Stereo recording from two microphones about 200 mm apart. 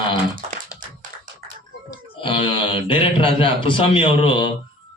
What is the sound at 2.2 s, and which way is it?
Speech, 25° left (ahead or behind).